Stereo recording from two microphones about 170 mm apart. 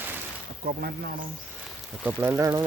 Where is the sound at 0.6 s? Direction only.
65° right (ahead or behind).